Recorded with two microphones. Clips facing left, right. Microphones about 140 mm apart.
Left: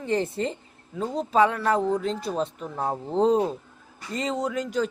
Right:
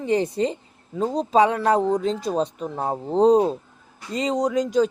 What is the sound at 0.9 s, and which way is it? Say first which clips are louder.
Speech: right 5 dB; 40° right (ahead or behind).